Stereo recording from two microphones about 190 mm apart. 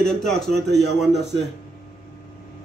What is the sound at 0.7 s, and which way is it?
Speech, 60° right (ahead or behind).